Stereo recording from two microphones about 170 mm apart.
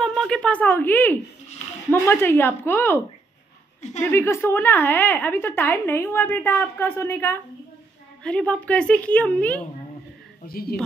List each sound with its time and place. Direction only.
0.0 s a woman's voice: centre (ahead or behind)
4.0 s a woman's voice: 15° left (ahead or behind)
10.4 s speech: 60° left (ahead or behind)